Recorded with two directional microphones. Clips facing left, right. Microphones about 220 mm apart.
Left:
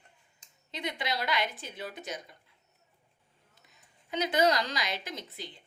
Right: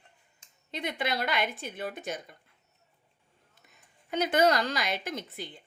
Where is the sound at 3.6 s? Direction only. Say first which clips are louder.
Right 2 dB; 50° right (ahead or behind).